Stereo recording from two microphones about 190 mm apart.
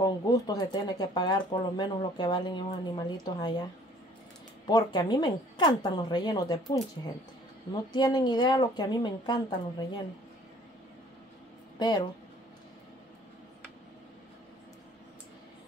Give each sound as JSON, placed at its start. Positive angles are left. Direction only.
{"t": 0.0, "sound": "speech", "side_deg": 20}
{"t": 4.6, "sound": "speech", "side_deg": 20}
{"t": 7.9, "sound": "speech", "side_deg": 20}
{"t": 11.8, "sound": "speech", "side_deg": 25}